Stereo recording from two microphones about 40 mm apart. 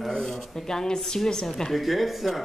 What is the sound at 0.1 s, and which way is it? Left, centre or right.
A man's voice, centre.